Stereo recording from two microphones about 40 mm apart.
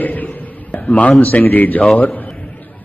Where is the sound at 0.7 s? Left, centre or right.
Left.